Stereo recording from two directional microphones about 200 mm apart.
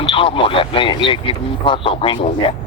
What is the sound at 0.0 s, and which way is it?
Speech, 25° left (ahead or behind).